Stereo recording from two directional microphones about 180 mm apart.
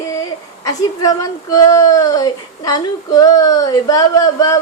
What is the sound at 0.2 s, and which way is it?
Speech, 20° left (ahead or behind).